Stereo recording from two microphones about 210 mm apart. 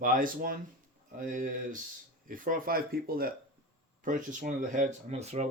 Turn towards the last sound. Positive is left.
turn(degrees=-30)  # may be behind; listen again after turning